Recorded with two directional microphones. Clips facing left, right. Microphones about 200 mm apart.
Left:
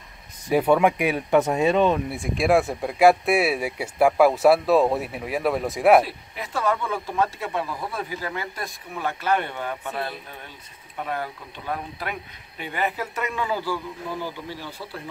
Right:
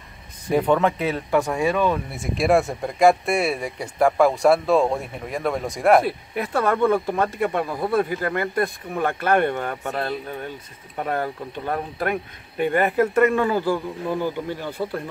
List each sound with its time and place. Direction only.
0.5 s speech: 10° left (ahead or behind)
2.1 s speech: centre (ahead or behind)
6.0 s speech: 55° right (ahead or behind)